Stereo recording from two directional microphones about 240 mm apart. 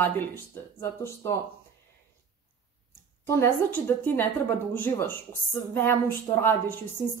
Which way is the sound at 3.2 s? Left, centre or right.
Centre.